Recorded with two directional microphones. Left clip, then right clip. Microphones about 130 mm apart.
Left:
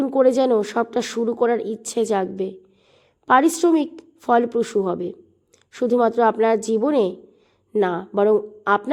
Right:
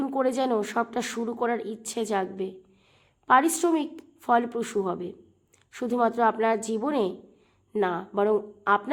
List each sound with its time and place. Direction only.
0.0 s a woman's voice: 40° left (ahead or behind)